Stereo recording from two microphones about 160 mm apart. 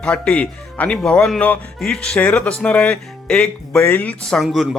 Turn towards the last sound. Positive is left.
turn(degrees=0)  # may be behind; listen again after turning